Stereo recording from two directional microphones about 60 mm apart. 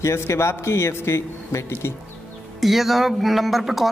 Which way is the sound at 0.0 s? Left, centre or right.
Left.